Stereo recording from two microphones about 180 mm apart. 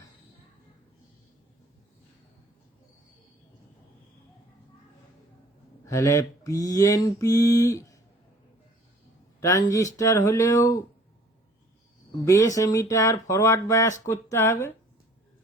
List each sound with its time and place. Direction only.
5.8 s mantra: 20° left (ahead or behind)
9.4 s speech: 20° left (ahead or behind)
12.2 s speech: 15° left (ahead or behind)